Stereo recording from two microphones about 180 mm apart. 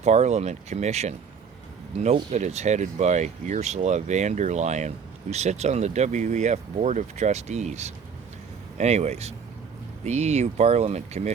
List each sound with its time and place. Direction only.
0.0 s speech: 35° right (ahead or behind)